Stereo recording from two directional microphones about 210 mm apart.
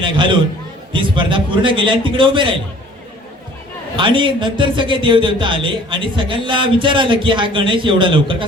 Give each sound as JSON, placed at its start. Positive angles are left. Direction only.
{"t": 0.9, "sound": "speech", "side_deg": -25}
{"t": 3.9, "sound": "speech", "side_deg": -25}